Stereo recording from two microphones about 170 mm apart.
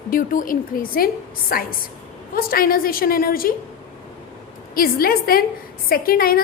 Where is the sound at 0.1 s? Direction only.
55° left (ahead or behind).